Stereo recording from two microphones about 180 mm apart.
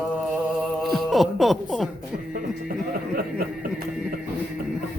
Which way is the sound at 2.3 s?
55° right (ahead or behind).